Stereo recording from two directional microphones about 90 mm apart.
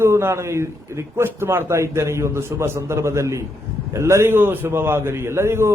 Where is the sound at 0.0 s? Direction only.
30° right (ahead or behind).